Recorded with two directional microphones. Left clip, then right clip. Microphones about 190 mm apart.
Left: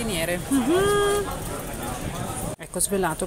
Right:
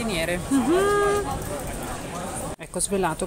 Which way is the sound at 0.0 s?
Centre (ahead or behind).